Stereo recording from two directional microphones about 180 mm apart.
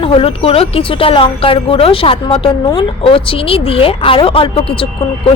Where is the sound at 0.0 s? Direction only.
30° left (ahead or behind).